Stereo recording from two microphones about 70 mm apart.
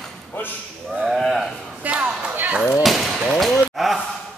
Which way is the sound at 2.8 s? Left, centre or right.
Centre.